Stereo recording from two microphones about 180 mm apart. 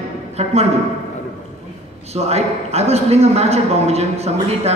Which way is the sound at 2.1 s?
35° right (ahead or behind).